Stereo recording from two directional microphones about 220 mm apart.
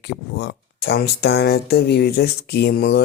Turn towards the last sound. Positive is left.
turn(degrees=45)  # may be behind; listen again after turning